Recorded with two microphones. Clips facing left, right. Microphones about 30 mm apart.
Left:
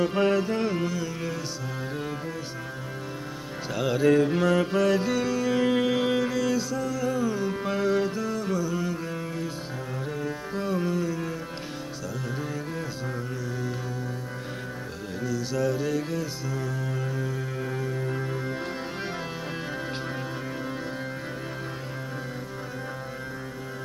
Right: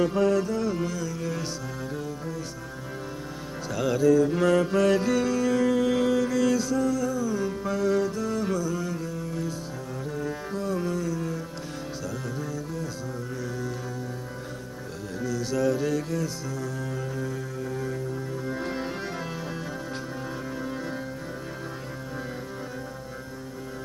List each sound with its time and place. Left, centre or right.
0.1 s music: left
0.7 s carnatic music: left
3.7 s carnatic music: left
4.0 s music: left
4.4 s music: centre
5.6 s music: left
6.3 s music: centre
7.1 s music: left
8.5 s carnatic music: centre
9.0 s music: left
15.2 s music: centre